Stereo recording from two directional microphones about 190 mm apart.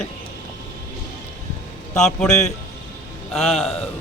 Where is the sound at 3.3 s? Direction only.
Centre (ahead or behind).